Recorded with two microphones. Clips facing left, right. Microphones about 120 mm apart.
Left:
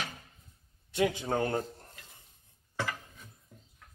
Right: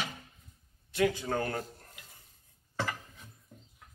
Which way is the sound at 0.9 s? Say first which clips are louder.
Even; 20° left (ahead or behind).